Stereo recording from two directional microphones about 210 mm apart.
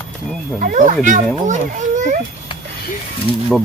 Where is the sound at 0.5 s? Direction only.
40° right (ahead or behind).